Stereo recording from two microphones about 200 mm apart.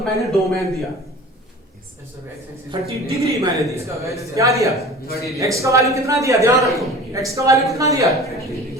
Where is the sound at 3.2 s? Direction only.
15° right (ahead or behind).